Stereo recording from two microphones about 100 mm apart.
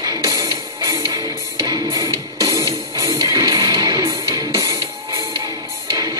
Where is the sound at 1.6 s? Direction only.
40° right (ahead or behind).